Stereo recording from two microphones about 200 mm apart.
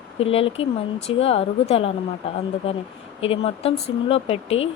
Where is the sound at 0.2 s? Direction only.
30° left (ahead or behind).